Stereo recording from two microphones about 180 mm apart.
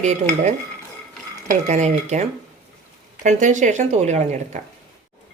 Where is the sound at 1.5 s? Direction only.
40° right (ahead or behind).